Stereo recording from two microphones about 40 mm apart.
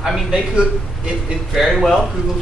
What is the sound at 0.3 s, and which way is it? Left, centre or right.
Speech, right.